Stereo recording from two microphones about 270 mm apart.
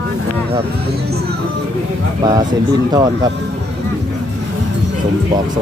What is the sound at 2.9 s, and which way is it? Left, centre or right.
Speech, centre.